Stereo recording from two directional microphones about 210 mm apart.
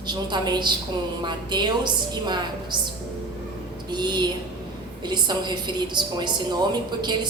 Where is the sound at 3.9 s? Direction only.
20° right (ahead or behind).